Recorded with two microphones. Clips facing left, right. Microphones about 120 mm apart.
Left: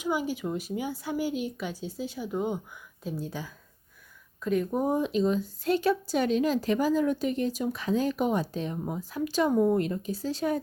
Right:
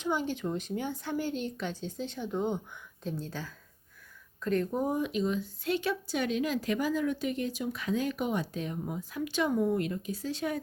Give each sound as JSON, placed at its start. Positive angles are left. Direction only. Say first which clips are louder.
{"t": 0.0, "sound": "speech", "louder": "left 2 dB", "side_deg": 10}
{"t": 4.9, "sound": "speech", "louder": "left 4 dB", "side_deg": 30}